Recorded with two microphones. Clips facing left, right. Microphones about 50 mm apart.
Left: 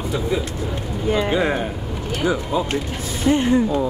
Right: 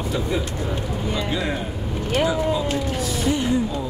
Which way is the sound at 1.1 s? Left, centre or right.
Left.